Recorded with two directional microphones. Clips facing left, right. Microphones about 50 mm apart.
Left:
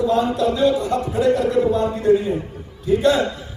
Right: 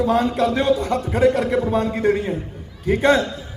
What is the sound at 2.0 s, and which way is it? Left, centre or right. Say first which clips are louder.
Speech: left 3 dB; right.